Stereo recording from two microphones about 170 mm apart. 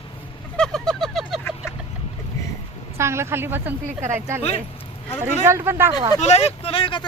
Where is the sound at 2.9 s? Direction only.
15° right (ahead or behind).